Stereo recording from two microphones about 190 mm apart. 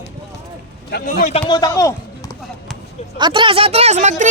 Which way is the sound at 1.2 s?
40° left (ahead or behind).